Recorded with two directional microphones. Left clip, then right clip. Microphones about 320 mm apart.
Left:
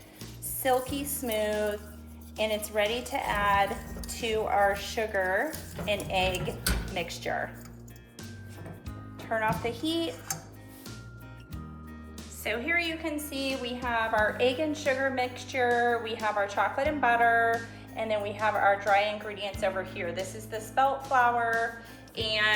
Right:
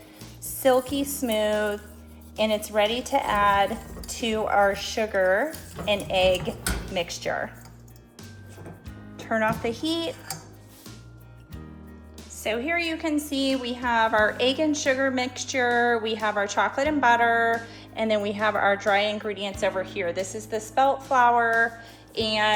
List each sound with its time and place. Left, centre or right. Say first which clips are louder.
0.6 s a woman's voice: right 6 dB; right
9.1 s speech: right 4 dB; right
12.4 s a woman's voice: right 3 dB; centre
22.1 s music: right 4 dB; centre